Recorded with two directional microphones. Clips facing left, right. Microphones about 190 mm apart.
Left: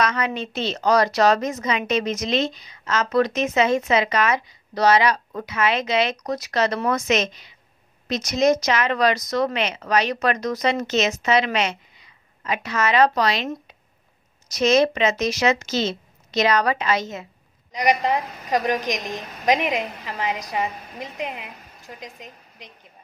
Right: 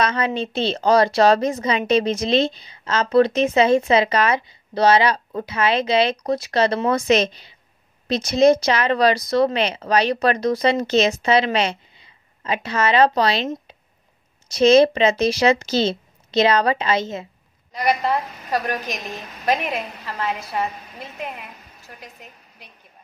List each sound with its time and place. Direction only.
0.0 s a woman's voice: 30° right (ahead or behind)
17.7 s a woman's voice: 15° left (ahead or behind)